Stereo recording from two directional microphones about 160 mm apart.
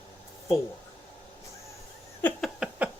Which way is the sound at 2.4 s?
5° right (ahead or behind).